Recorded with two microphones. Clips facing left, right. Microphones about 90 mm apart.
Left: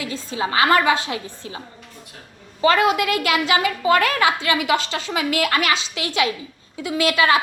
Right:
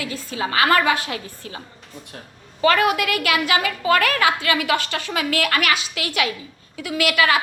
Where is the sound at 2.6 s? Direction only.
25° left (ahead or behind).